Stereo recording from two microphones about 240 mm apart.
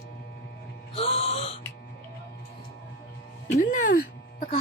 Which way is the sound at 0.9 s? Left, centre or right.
Left.